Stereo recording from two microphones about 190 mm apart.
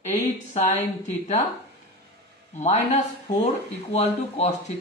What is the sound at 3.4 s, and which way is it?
A man's voice, 35° left (ahead or behind).